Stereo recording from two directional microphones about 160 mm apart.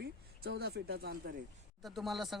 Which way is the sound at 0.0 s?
90° right.